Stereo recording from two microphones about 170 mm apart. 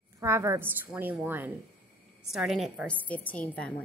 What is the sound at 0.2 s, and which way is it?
A woman's voice, 15° right (ahead or behind).